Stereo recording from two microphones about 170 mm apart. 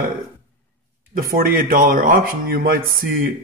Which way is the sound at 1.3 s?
55° right (ahead or behind).